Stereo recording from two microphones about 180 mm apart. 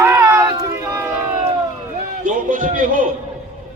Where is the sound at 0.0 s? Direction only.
15° right (ahead or behind).